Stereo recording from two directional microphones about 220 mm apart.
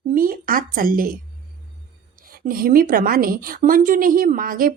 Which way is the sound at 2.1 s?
40° right (ahead or behind).